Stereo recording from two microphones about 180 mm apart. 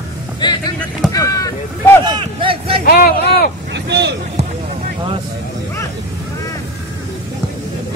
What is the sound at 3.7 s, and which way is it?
Speech, 75° right (ahead or behind).